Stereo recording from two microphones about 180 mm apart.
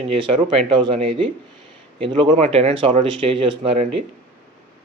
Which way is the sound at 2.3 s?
40° right (ahead or behind).